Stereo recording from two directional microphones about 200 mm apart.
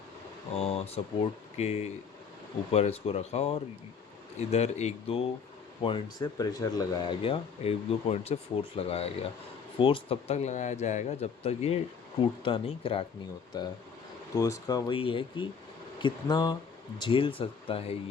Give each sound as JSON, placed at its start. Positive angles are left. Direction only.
{"t": 0.5, "sound": "speech", "side_deg": 30}